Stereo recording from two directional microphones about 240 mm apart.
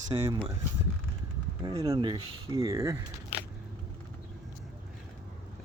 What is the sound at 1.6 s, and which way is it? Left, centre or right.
Speech, centre.